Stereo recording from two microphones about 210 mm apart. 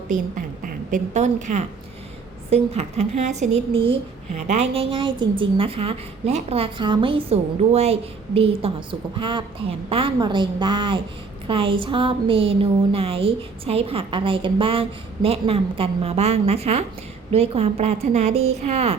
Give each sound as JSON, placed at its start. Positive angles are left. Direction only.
{"t": 0.1, "sound": "a woman's voice", "side_deg": -40}